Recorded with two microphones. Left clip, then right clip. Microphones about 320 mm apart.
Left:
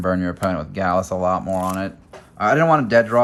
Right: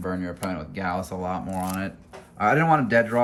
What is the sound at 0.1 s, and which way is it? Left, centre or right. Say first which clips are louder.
Speech: left 10 dB; left.